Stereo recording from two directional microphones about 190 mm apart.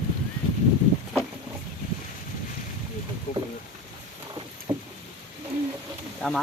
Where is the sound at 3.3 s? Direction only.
50° left (ahead or behind).